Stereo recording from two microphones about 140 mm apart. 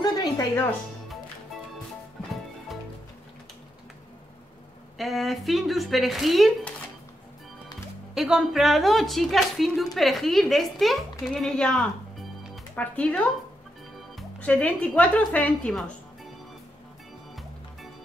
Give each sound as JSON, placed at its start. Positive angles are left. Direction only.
{"t": 0.0, "sound": "music", "side_deg": 30}
{"t": 4.9, "sound": "speech", "side_deg": 0}
{"t": 8.1, "sound": "speech", "side_deg": -5}